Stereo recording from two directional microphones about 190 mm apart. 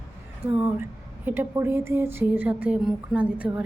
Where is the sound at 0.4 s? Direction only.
10° right (ahead or behind).